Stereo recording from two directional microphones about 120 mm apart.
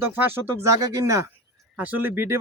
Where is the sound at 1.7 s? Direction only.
15° right (ahead or behind).